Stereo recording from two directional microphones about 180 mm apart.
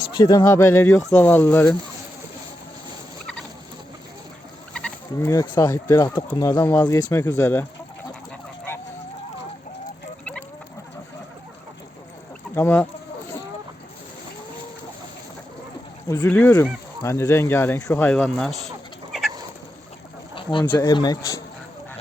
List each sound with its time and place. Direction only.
0.1 s speech: 20° left (ahead or behind)
4.7 s fowl: 5° left (ahead or behind)
5.3 s speech: 20° left (ahead or behind)
12.5 s speech: 10° left (ahead or behind)
16.2 s speech: 5° left (ahead or behind)
20.3 s a sound: 25° left (ahead or behind)
20.7 s speech: 20° left (ahead or behind)